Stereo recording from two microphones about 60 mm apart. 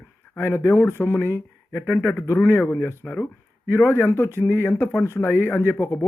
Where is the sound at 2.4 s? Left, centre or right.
Left.